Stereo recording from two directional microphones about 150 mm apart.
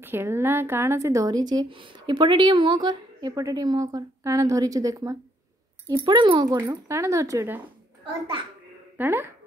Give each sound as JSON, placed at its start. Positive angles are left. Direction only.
{"t": 0.0, "sound": "a woman's voice", "side_deg": -15}
{"t": 6.7, "sound": "a woman's voice", "side_deg": -20}
{"t": 8.9, "sound": "speech", "side_deg": -15}